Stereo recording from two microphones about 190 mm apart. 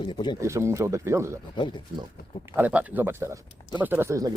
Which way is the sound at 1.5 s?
25° left (ahead or behind).